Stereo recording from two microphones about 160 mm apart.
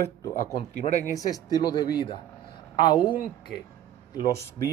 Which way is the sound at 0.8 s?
45° left (ahead or behind).